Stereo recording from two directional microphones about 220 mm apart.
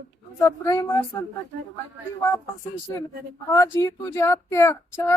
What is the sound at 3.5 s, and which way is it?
Speech, 15° left (ahead or behind).